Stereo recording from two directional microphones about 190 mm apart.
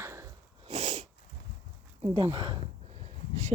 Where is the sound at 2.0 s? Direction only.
30° right (ahead or behind).